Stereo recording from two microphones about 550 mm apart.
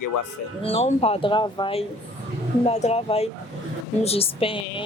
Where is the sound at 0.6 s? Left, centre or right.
Centre.